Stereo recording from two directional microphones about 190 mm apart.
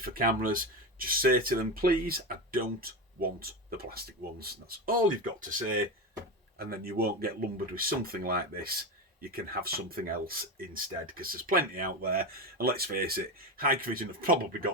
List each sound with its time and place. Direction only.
0.0 s speech: 50° right (ahead or behind)